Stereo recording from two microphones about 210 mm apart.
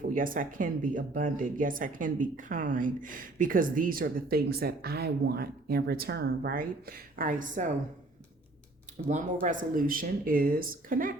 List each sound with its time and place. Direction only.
0.0 s speech: 40° right (ahead or behind)
9.0 s speech: 35° right (ahead or behind)